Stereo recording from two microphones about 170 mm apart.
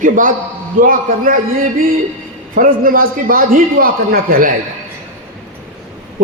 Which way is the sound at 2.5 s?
55° right (ahead or behind).